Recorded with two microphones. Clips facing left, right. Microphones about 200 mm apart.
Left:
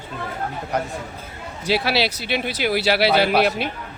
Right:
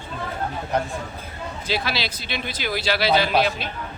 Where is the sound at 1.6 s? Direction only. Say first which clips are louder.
Left 6 dB; 70° left (ahead or behind).